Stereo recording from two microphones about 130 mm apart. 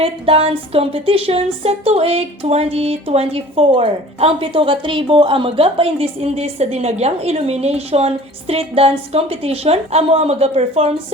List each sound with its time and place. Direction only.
0.0 s speech: 45° right (ahead or behind)